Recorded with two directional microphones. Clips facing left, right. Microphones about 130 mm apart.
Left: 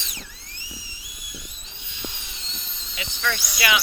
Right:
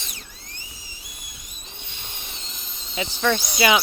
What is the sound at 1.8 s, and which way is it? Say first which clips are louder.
Fireworks: left 5 dB; 50° right (ahead or behind).